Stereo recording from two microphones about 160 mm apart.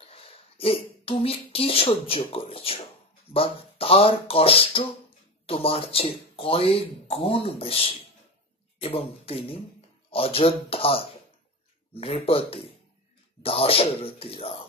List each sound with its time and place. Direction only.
0.0 s speech: 35° left (ahead or behind)